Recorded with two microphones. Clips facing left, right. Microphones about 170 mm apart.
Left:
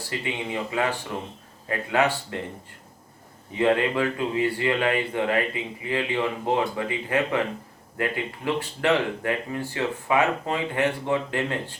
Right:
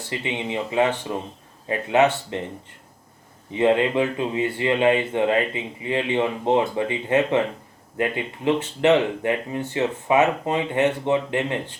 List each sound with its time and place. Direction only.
0.1 s speech: 20° right (ahead or behind)
3.5 s speech: 20° right (ahead or behind)